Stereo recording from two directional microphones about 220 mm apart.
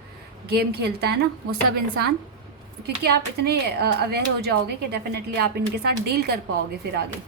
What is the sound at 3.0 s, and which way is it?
A woman's voice, 50° right (ahead or behind).